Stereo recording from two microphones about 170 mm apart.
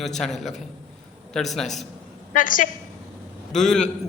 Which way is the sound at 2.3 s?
50° left (ahead or behind).